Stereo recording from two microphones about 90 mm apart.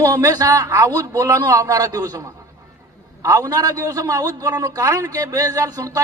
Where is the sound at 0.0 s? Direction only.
45° right (ahead or behind).